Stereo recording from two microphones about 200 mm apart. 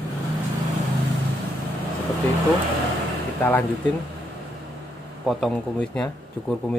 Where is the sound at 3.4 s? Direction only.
10° left (ahead or behind).